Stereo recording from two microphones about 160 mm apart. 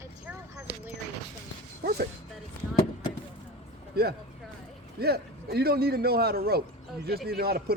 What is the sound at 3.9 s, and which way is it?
Speech, 80° right.